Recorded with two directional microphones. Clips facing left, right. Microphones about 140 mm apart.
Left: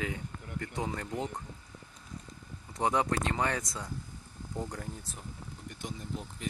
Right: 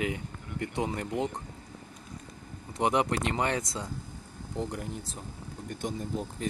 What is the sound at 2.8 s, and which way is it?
Speech, 15° right (ahead or behind).